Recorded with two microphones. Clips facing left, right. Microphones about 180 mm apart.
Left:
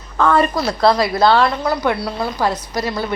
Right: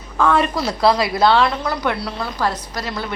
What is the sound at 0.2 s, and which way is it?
A woman's voice, 5° right (ahead or behind).